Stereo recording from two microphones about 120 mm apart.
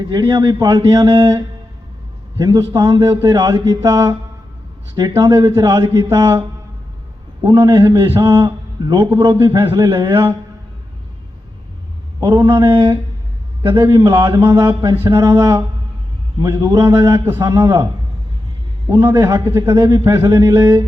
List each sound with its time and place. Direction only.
0.0 s a man's voice: 40° right (ahead or behind)
7.4 s a man's voice: 20° right (ahead or behind)
12.6 s a man's voice: 40° right (ahead or behind); by 17.8 s 25° right (ahead or behind)
18.9 s a man's voice: 20° right (ahead or behind)